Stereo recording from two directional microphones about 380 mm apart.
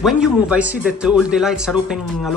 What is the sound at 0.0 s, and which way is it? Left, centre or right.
A man's voice, centre.